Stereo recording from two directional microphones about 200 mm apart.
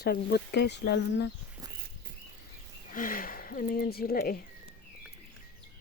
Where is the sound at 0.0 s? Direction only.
55° left (ahead or behind).